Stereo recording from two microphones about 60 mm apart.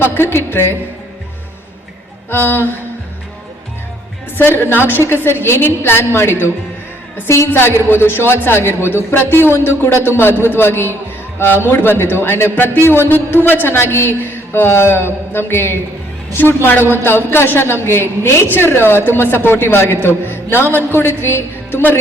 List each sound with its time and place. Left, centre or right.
0.0 s a man's voice: left
2.3 s a man's voice: left
4.4 s a man's voice: left